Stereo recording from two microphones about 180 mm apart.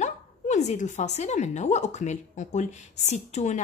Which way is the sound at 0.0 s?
40° left (ahead or behind).